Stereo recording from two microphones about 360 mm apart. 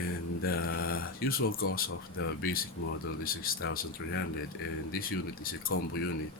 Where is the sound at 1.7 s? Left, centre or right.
Left.